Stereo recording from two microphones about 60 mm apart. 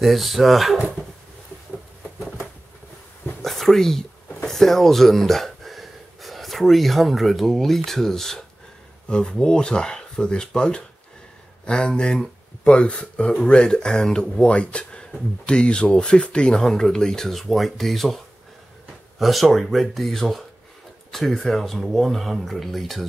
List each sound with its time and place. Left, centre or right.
0.0 s speech: centre
3.4 s a sound: centre
4.5 s speech: centre